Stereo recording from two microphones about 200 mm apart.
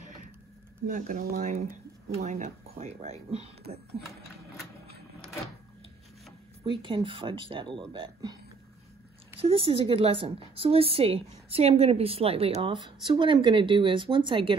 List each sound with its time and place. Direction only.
0.8 s speech: 40° right (ahead or behind)
6.6 s a woman's voice: 25° right (ahead or behind)
9.4 s a woman's voice: 25° right (ahead or behind)